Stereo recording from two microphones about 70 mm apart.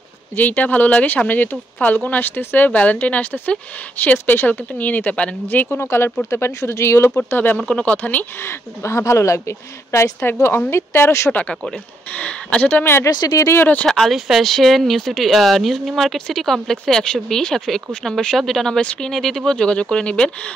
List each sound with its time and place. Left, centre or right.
0.4 s speech: left
7.2 s speech: left
7.6 s speech: centre
8.5 s speech: left
12.2 s speech: centre
13.1 s speech: left
13.8 s speech: centre